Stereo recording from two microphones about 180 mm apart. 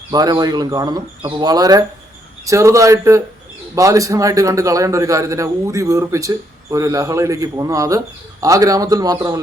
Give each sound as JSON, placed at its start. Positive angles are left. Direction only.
{"t": 0.1, "sound": "a man's voice", "side_deg": -20}